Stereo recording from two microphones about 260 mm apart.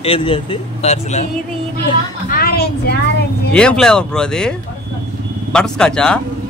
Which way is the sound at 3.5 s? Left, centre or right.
Centre.